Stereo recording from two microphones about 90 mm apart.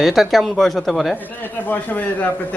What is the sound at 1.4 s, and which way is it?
Speech, 20° left (ahead or behind).